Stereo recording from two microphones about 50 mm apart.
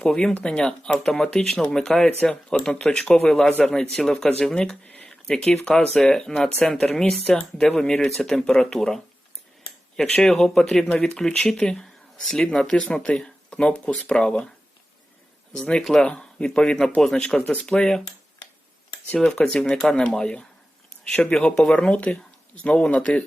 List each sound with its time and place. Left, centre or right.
0.0 s speech: centre
0.9 s speech: centre
5.0 s a sound: centre
5.6 s speech: centre
10.2 s speech: centre
15.5 s speech: centre
19.2 s speech: centre
21.9 s speech: left